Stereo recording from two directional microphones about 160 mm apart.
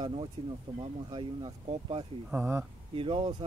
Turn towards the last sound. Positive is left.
turn(degrees=-30)  # may be behind; listen again after turning